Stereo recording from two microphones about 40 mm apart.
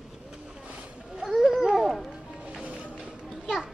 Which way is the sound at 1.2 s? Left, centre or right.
Centre.